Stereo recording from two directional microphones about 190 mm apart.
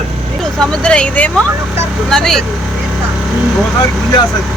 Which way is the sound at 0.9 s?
5° left (ahead or behind).